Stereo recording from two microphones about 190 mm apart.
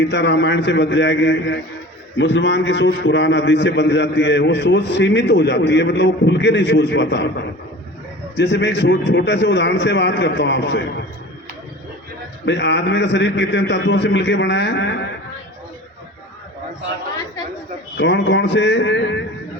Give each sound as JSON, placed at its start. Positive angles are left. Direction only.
{"t": 0.0, "sound": "a man's voice", "side_deg": 65}
{"t": 12.5, "sound": "a man's voice", "side_deg": 65}
{"t": 17.9, "sound": "a man's voice", "side_deg": 70}